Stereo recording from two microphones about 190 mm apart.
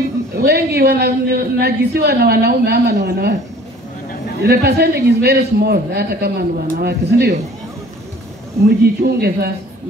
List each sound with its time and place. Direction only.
0.4 s a man's voice: 55° right (ahead or behind)
4.4 s a man's voice: 55° right (ahead or behind)
8.6 s a man's voice: 55° right (ahead or behind)